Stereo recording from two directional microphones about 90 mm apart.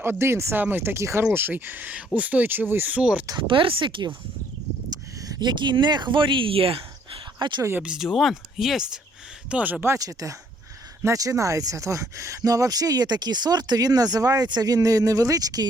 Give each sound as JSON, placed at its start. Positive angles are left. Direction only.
{"t": 0.0, "sound": "speech", "side_deg": -25}
{"t": 3.3, "sound": "speech", "side_deg": -70}
{"t": 4.9, "sound": "a sound", "side_deg": -45}
{"t": 5.3, "sound": "speech", "side_deg": -55}
{"t": 7.3, "sound": "speech", "side_deg": -55}
{"t": 7.8, "sound": "speech", "side_deg": -5}
{"t": 10.0, "sound": "speech", "side_deg": -40}